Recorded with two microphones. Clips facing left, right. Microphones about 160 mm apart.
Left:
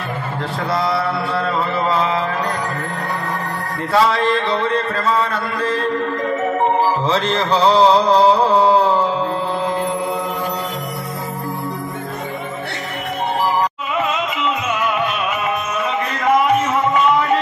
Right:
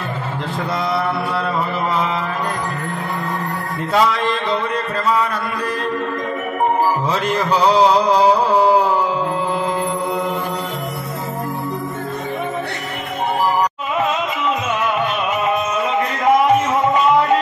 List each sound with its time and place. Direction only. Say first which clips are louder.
3.9 s music: left 2 dB; 20° right (ahead or behind)
7.1 s mantra: left 1 dB; 10° right (ahead or behind)